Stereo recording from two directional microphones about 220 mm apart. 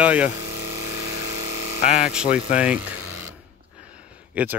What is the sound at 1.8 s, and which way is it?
Speech, 30° left (ahead or behind).